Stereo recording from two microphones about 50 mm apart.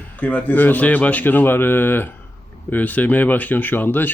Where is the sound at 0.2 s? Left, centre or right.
Left.